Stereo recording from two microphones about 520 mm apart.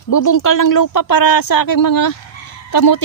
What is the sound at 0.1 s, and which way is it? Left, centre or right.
Speech, left.